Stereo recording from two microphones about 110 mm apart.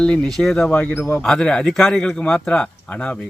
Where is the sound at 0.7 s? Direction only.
15° left (ahead or behind).